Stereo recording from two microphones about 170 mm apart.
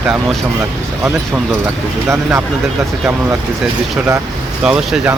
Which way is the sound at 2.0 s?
15° right (ahead or behind).